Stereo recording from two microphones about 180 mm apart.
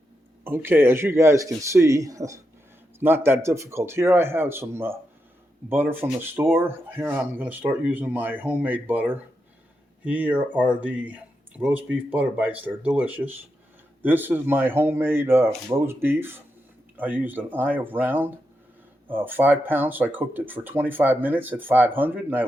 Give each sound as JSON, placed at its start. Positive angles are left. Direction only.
{"t": 0.4, "sound": "speech", "side_deg": -10}